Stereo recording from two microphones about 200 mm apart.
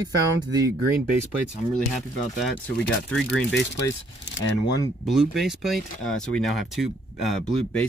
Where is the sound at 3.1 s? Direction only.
5° left (ahead or behind).